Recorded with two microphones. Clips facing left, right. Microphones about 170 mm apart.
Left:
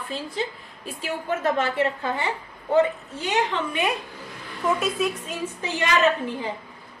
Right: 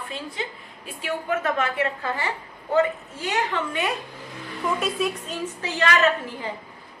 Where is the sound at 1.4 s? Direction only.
30° left (ahead or behind).